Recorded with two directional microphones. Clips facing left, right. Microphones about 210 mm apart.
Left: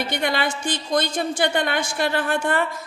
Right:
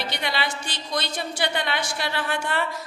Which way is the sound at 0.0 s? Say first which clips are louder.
Left 5 dB; 50° left (ahead or behind).